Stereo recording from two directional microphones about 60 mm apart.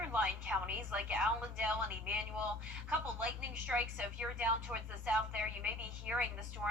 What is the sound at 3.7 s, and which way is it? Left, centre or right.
A woman's voice, right.